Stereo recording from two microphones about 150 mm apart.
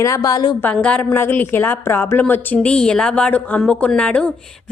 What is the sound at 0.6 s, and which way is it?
A woman's voice, 10° left (ahead or behind).